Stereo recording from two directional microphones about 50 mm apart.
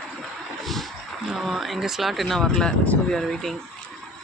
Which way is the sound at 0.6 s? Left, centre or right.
Centre.